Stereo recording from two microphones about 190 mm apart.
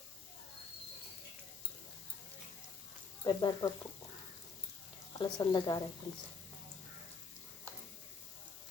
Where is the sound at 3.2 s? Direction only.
25° left (ahead or behind).